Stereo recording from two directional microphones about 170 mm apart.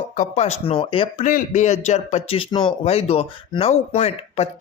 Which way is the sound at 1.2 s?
45° left (ahead or behind).